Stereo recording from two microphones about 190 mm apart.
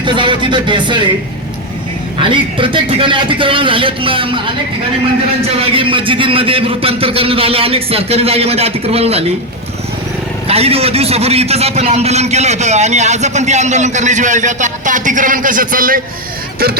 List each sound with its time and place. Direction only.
0.0 s a man's voice: 25° right (ahead or behind)
2.2 s a man's voice: 25° right (ahead or behind)
5.5 s a man's voice: 25° right (ahead or behind)
10.4 s a man's voice: 30° right (ahead or behind); by 16.0 s 45° right (ahead or behind)